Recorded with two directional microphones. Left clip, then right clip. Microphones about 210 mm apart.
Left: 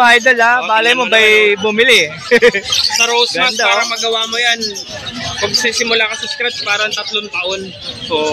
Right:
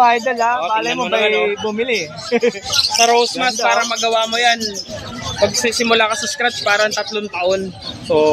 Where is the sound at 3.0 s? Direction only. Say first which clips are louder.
Even; 45° right (ahead or behind).